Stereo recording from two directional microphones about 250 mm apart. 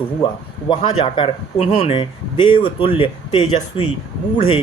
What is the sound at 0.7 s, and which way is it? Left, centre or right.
Speech, centre.